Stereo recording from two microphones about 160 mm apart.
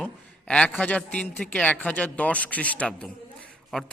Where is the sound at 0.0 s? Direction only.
5° left (ahead or behind).